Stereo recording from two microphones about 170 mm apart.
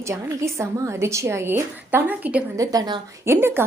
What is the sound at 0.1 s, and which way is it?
A woman's voice, 15° right (ahead or behind).